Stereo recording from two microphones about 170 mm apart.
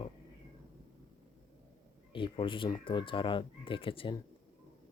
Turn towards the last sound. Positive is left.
turn(degrees=30)  # may be behind; listen again after turning